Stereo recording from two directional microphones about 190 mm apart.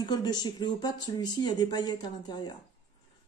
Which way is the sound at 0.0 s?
20° left (ahead or behind).